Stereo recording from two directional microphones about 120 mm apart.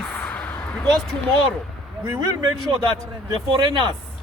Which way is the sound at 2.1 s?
40° right (ahead or behind).